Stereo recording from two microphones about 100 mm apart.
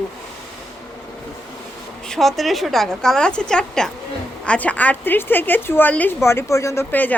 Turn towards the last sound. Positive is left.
turn(degrees=15)  # may be behind; listen again after turning